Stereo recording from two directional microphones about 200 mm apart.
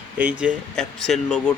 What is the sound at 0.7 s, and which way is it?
Speech, 5° left (ahead or behind).